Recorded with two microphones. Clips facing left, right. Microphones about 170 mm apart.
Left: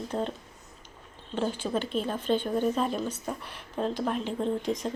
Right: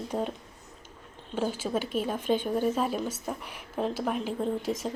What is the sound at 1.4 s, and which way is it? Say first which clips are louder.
A woman's voice: even; 5° right (ahead or behind).